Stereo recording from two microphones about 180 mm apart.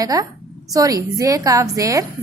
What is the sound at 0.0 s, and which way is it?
A woman's voice, 20° right (ahead or behind).